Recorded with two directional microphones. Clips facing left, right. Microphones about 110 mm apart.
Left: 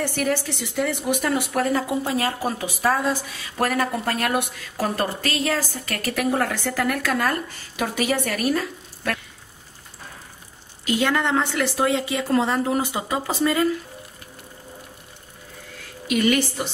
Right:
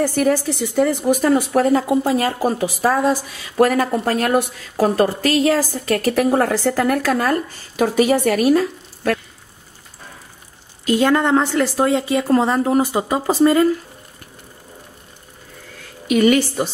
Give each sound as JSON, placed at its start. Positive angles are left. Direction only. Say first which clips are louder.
{"t": 0.0, "sound": "speech", "louder": "right 7 dB", "side_deg": -40}
{"t": 11.0, "sound": "speech", "louder": "right 6 dB", "side_deg": -40}
{"t": 16.1, "sound": "a woman's voice", "louder": "right 6 dB", "side_deg": -50}